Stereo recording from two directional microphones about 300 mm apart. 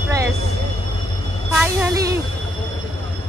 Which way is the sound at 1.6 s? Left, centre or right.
Centre.